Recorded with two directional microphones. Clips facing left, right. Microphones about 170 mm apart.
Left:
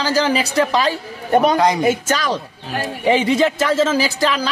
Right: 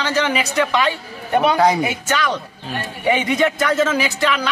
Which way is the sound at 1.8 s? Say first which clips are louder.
Left 4 dB; 40° left (ahead or behind).